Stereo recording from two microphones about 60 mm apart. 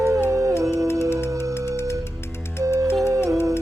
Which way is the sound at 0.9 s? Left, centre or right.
Left.